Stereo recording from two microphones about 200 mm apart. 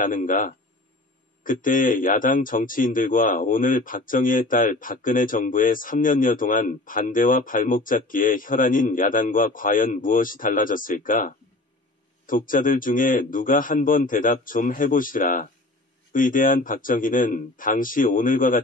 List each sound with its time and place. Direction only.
0.0 s a man's voice: 40° left (ahead or behind)